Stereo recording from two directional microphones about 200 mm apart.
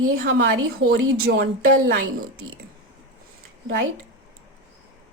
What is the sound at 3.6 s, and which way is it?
Speech, 65° right (ahead or behind).